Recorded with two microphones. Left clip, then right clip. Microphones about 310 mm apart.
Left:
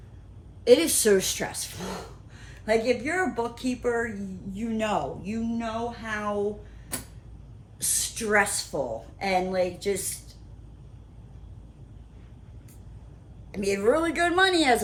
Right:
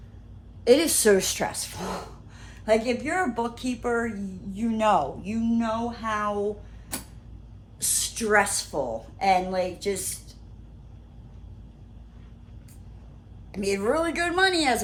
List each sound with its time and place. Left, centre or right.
0.6 s speech: centre
7.8 s a woman's voice: centre
13.5 s a woman's voice: centre